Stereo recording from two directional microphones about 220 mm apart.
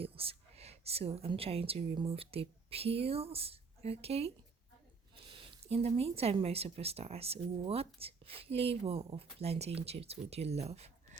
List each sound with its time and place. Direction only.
0.0 s a woman's voice: 25° right (ahead or behind)
5.3 s speech: 25° right (ahead or behind)